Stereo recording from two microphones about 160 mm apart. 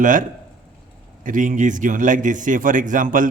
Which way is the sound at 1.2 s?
55° right (ahead or behind).